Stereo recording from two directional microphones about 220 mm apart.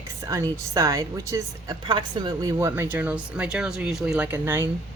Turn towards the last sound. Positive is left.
turn(degrees=-10)  # may be behind; listen again after turning